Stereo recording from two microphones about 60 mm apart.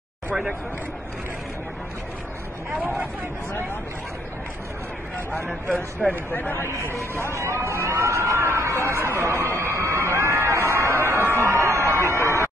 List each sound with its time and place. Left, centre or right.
6.0 s speech: centre
6.3 s a man's voice: left
7.0 s speech: left
7.3 s speech: right
9.6 s crowd: right